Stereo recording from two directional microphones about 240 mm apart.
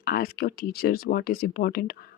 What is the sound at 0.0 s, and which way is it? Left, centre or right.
Speech, left.